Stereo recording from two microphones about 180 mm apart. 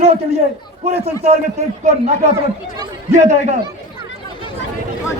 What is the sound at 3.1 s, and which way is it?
Speech, 40° right (ahead or behind).